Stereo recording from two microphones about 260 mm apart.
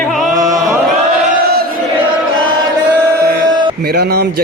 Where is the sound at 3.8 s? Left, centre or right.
Right.